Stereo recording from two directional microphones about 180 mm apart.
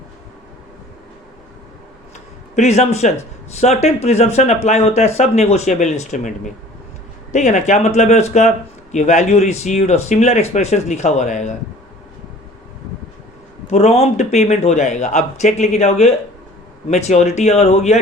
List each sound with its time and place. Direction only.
2.6 s speech: 40° left (ahead or behind)
13.7 s speech: 35° left (ahead or behind)